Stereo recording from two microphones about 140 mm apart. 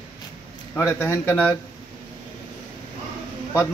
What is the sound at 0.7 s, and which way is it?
Speech, 15° left (ahead or behind).